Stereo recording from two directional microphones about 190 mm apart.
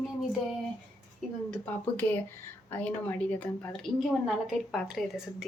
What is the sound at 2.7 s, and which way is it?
A woman's voice, 10° left (ahead or behind).